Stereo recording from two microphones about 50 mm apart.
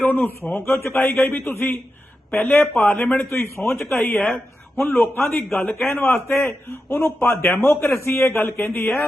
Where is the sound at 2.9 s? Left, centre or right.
Centre.